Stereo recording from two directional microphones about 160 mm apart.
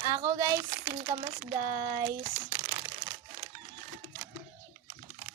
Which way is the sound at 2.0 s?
20° right (ahead or behind).